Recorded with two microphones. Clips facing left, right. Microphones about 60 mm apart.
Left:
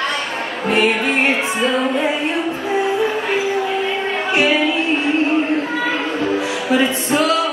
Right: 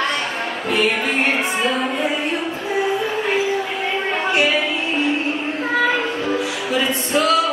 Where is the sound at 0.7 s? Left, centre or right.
Left.